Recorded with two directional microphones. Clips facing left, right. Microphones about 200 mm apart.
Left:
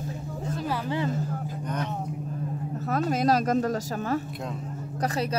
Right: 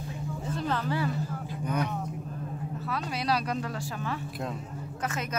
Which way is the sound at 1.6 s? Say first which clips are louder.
Right 3 dB; 10° right (ahead or behind).